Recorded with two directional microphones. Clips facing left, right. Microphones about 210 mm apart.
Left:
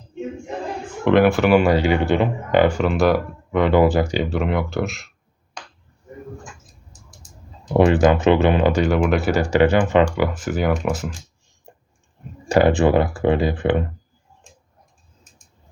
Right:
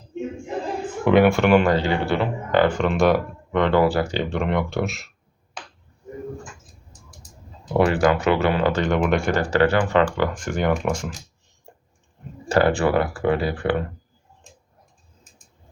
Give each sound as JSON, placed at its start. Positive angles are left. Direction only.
{"t": 1.0, "sound": "speech", "side_deg": 0}
{"t": 5.6, "sound": "finger snapping", "side_deg": -5}
{"t": 7.7, "sound": "speech", "side_deg": 20}
{"t": 12.5, "sound": "speech", "side_deg": 15}